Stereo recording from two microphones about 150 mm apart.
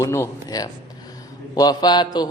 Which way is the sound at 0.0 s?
20° left (ahead or behind).